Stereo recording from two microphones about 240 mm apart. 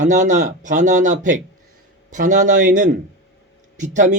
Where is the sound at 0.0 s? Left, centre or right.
Right.